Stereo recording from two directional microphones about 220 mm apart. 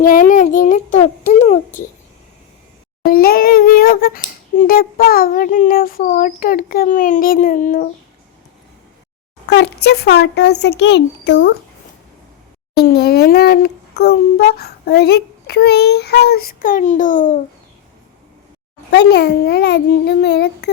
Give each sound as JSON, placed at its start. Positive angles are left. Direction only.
{"t": 0.0, "sound": "speech", "side_deg": 40}
{"t": 3.0, "sound": "speech", "side_deg": 40}
{"t": 9.5, "sound": "a child's voice", "side_deg": 50}
{"t": 12.7, "sound": "a child's voice", "side_deg": 45}
{"t": 18.9, "sound": "a child's voice", "side_deg": 50}